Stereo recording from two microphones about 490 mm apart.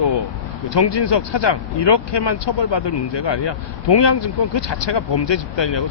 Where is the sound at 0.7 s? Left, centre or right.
Left.